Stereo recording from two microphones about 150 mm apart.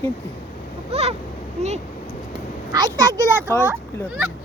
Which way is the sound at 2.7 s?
20° right (ahead or behind).